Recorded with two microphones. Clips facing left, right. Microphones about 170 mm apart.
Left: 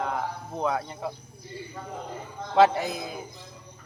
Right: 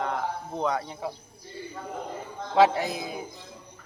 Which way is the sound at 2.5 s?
Centre (ahead or behind).